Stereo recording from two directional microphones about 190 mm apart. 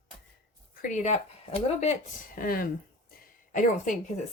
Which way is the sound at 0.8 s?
40° left (ahead or behind).